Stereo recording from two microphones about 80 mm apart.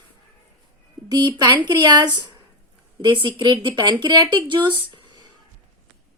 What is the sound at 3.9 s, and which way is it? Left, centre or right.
Speech, right.